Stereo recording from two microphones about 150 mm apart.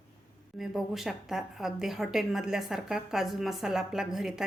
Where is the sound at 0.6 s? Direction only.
Centre (ahead or behind).